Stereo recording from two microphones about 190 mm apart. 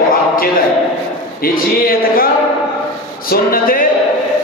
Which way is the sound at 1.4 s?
50° left (ahead or behind).